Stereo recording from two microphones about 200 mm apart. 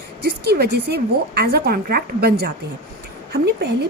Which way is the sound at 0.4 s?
55° right (ahead or behind).